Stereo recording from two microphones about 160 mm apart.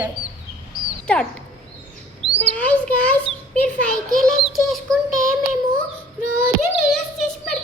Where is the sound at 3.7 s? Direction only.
60° right (ahead or behind).